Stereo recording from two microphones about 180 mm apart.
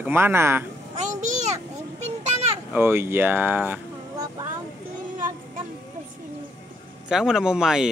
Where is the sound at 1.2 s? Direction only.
40° right (ahead or behind).